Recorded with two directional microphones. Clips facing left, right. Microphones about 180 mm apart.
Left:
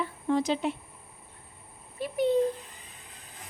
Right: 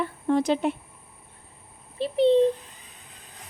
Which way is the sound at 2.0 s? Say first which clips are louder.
Right 6 dB; 30° right (ahead or behind).